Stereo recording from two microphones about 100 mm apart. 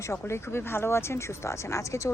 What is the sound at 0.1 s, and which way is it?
Speech, 25° left (ahead or behind).